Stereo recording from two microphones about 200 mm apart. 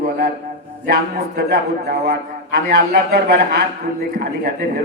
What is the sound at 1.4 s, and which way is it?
A man's voice, 55° right (ahead or behind).